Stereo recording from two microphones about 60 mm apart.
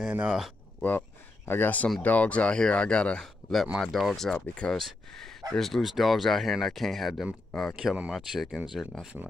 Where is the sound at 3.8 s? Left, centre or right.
Centre.